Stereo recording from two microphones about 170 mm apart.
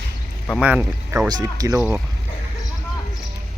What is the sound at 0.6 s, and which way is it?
Speech, 10° right (ahead or behind).